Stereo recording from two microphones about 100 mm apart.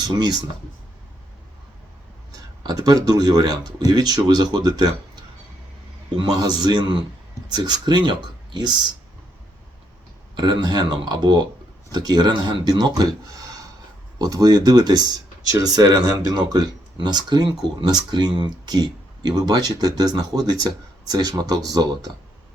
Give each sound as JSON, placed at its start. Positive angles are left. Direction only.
{"t": 2.6, "sound": "speech", "side_deg": -40}
{"t": 6.4, "sound": "speech", "side_deg": -45}
{"t": 10.3, "sound": "speech", "side_deg": -45}
{"t": 14.2, "sound": "speech", "side_deg": -40}